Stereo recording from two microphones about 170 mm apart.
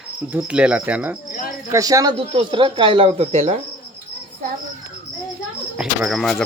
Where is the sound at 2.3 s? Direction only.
30° right (ahead or behind).